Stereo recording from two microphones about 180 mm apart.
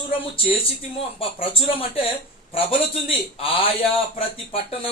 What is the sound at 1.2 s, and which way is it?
Speech, 30° left (ahead or behind).